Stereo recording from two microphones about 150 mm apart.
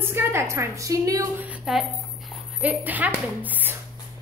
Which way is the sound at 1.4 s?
5° right (ahead or behind).